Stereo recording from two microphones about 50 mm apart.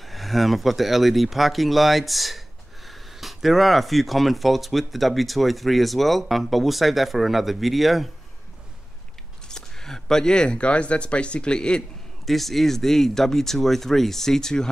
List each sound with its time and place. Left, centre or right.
0.0 s speech: centre
9.5 s speech: centre
12.3 s speech: centre